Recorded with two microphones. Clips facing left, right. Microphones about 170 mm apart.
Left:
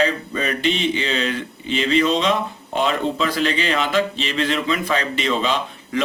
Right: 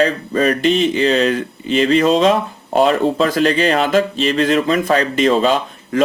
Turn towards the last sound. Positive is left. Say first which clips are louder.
# right 5 dB
turn(degrees=-45)  # may be behind; listen again after turning